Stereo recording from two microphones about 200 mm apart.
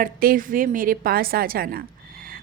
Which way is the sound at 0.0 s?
45° right (ahead or behind).